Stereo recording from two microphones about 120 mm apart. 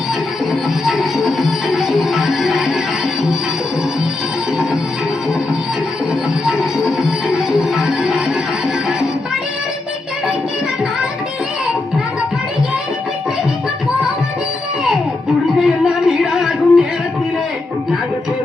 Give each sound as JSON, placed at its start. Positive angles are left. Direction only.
{"t": 0.9, "sound": "music", "side_deg": 0}
{"t": 6.4, "sound": "music", "side_deg": -5}
{"t": 15.5, "sound": "music", "side_deg": -5}